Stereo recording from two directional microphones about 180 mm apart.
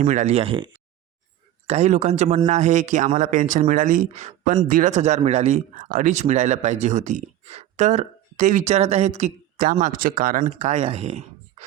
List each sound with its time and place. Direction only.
0.0 s a man's voice: 45° right (ahead or behind)